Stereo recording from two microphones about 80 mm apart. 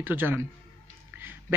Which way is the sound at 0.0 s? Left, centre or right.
Right.